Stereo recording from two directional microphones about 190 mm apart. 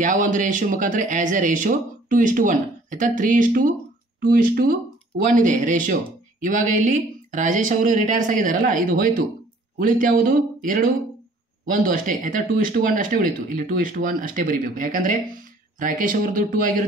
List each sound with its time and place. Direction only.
0.0 s speech: 40° right (ahead or behind)